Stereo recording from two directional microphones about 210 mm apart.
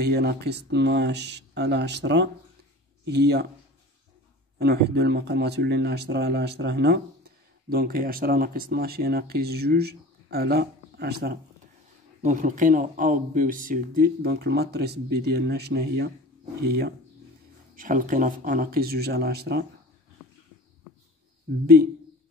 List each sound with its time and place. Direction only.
0.0 s speech: 50° right (ahead or behind)
4.6 s speech: 50° right (ahead or behind)
12.2 s speech: 35° right (ahead or behind)
21.5 s speech: 45° right (ahead or behind)